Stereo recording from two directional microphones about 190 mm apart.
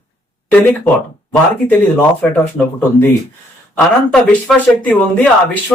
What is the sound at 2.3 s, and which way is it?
Speech, 10° left (ahead or behind).